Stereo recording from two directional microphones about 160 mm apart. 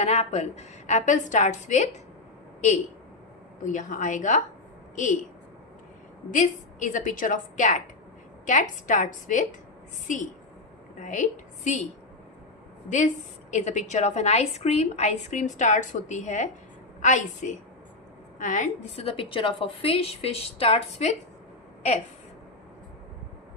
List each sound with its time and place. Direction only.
0.0 s a woman's voice: 45° left (ahead or behind)
6.3 s a woman's voice: 50° left (ahead or behind)
13.5 s a woman's voice: 45° left (ahead or behind)